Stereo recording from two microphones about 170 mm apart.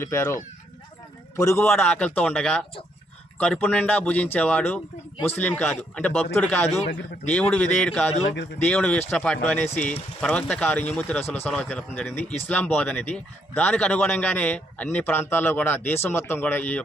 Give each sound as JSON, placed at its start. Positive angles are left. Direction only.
{"t": 0.0, "sound": "speech", "side_deg": 15}
{"t": 1.5, "sound": "speech", "side_deg": 5}